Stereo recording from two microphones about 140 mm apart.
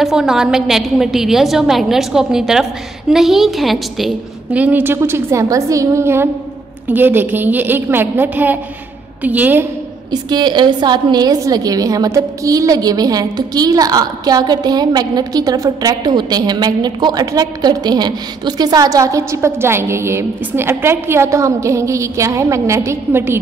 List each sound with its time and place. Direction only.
0.0 s a woman's voice: 5° right (ahead or behind)
10.1 s a woman's voice: 30° right (ahead or behind)